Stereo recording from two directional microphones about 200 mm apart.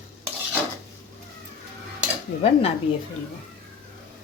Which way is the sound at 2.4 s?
30° left (ahead or behind).